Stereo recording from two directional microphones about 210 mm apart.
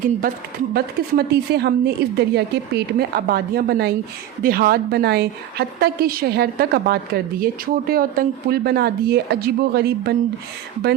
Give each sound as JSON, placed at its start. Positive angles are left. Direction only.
{"t": 0.7, "sound": "a woman's voice", "side_deg": -50}